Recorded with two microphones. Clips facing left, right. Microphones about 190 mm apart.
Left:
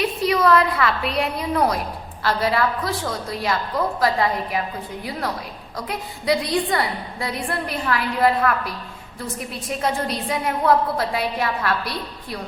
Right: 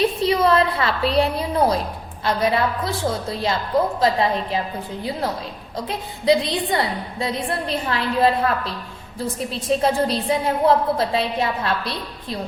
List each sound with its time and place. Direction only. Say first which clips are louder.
0.0 s a woman's voice: right 1 dB; 25° right (ahead or behind)
5.7 s a woman's voice: right 1 dB; 25° right (ahead or behind)